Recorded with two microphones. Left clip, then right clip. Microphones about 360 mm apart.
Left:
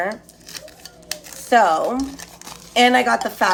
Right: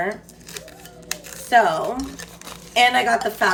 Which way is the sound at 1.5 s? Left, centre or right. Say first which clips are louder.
Left 2 dB; centre.